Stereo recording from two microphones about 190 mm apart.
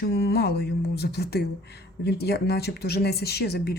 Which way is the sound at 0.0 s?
60° left (ahead or behind).